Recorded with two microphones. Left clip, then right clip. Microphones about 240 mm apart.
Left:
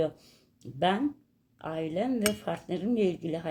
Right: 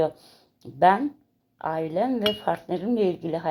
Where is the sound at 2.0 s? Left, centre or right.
Centre.